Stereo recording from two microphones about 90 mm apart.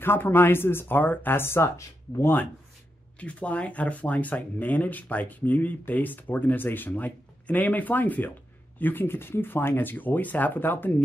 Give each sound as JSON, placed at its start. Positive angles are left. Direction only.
{"t": 0.0, "sound": "speech", "side_deg": 25}
{"t": 3.2, "sound": "speech", "side_deg": 15}